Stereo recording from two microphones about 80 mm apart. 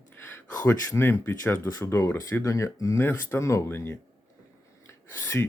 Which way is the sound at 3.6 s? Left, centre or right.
Left.